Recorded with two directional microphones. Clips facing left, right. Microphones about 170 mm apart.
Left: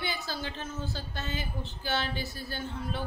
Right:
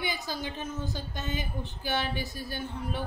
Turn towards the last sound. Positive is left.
turn(degrees=-15)  # may be behind; listen again after turning